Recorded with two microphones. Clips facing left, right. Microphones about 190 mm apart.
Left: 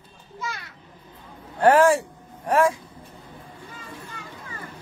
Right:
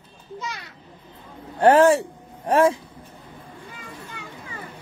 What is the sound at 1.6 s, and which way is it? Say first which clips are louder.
A man's voice: right 2 dB; 25° right (ahead or behind).